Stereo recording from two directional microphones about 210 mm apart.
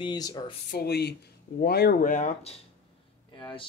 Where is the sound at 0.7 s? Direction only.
50° left (ahead or behind).